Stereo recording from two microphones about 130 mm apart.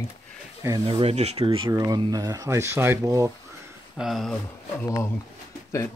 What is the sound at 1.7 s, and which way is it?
Speech, 30° right (ahead or behind).